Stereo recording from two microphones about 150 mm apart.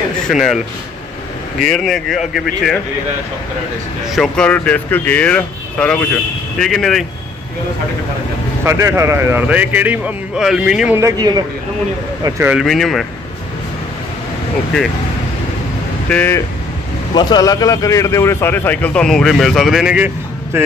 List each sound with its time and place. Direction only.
0.3 s speech: centre (ahead or behind)
1.7 s speech: centre (ahead or behind)
4.1 s speech: 5° left (ahead or behind)
8.6 s a man's voice: 20° right (ahead or behind)
11.0 s a man's voice: 25° right (ahead or behind)
12.3 s a man's voice: 15° right (ahead or behind)
12.5 s speech: centre (ahead or behind)
16.1 s speech: 10° left (ahead or behind)
17.1 s speech: 30° left (ahead or behind); by 20.1 s 5° right (ahead or behind)